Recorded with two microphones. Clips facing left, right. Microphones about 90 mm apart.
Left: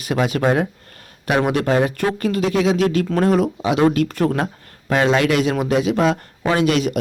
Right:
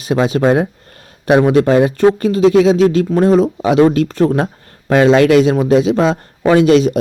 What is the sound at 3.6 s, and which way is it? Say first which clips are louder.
Speech: right 5 dB; 35° right (ahead or behind).